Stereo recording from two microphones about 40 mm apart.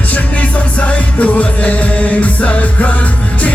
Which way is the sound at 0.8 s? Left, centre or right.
Left.